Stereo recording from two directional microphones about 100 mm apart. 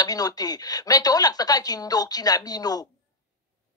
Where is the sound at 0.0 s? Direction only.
40° left (ahead or behind).